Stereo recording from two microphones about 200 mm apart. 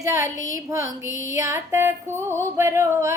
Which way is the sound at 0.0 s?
15° right (ahead or behind).